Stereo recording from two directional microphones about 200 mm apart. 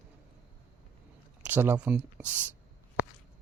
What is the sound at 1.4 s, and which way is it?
Speech, 10° right (ahead or behind).